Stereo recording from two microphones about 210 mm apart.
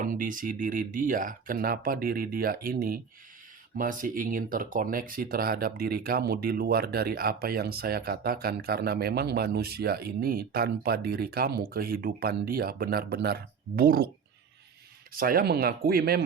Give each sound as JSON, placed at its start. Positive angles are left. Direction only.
{"t": 0.0, "sound": "speech", "side_deg": -40}
{"t": 15.1, "sound": "speech", "side_deg": -45}